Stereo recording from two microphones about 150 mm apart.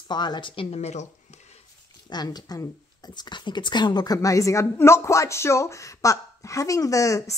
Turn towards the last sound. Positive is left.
turn(degrees=20)  # may be behind; listen again after turning